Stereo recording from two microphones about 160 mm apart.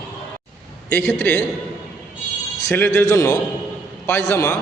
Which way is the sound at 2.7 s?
15° left (ahead or behind).